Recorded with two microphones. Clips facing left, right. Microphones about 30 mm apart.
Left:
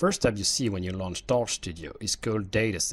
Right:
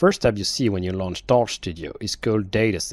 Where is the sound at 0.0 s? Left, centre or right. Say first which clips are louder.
Right 6 dB; right.